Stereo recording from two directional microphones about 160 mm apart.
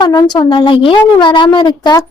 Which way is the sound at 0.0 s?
25° left (ahead or behind).